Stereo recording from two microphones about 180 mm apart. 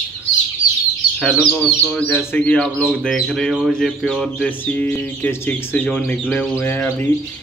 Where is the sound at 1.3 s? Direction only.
Centre (ahead or behind).